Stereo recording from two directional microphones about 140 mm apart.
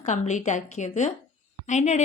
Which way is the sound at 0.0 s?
60° left (ahead or behind).